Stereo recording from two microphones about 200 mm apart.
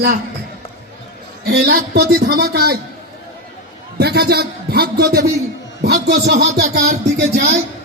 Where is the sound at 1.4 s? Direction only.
50° right (ahead or behind).